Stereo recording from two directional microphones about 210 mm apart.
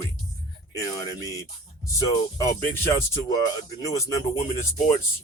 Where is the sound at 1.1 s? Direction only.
15° left (ahead or behind).